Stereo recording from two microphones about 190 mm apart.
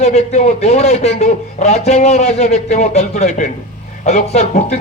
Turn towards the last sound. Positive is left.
turn(degrees=35)  # may be behind; listen again after turning